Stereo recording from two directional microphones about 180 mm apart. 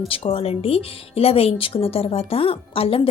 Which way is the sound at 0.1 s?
30° left (ahead or behind).